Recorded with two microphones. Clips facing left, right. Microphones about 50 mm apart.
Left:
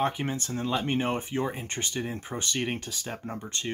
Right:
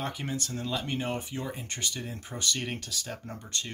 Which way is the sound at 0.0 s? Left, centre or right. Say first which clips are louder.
Left 6 dB; left.